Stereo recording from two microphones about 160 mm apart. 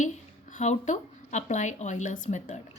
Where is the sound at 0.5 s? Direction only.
50° left (ahead or behind).